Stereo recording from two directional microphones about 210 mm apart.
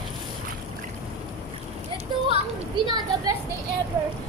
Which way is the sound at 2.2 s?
25° right (ahead or behind).